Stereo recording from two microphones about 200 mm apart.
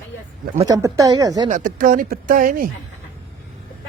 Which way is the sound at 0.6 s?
15° right (ahead or behind).